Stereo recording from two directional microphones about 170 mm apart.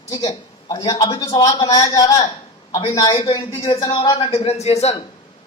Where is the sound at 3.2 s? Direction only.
35° left (ahead or behind).